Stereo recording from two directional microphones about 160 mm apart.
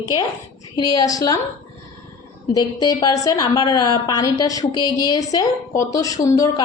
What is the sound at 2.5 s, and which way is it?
A woman's voice, 25° left (ahead or behind).